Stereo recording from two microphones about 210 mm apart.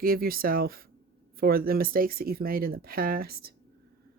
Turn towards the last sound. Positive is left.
turn(degrees=-45)  # may be behind; listen again after turning